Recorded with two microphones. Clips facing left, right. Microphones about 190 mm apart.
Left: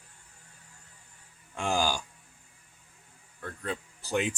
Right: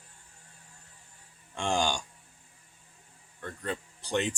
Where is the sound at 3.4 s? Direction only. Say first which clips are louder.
Even; centre (ahead or behind).